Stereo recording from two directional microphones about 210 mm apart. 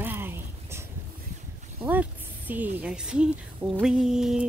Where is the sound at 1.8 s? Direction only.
10° right (ahead or behind).